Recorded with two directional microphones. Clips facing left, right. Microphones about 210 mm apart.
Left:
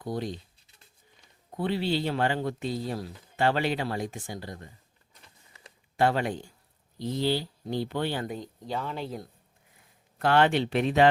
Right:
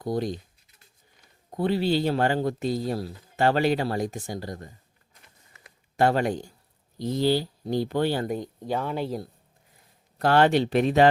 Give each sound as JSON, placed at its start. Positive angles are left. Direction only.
{"t": 0.0, "sound": "speech", "side_deg": -40}
{"t": 1.5, "sound": "speech", "side_deg": -40}
{"t": 6.0, "sound": "speech", "side_deg": -40}
{"t": 8.4, "sound": "speech", "side_deg": -55}
{"t": 9.0, "sound": "speech", "side_deg": -35}